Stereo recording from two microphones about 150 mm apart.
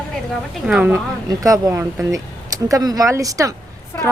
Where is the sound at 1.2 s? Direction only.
25° right (ahead or behind).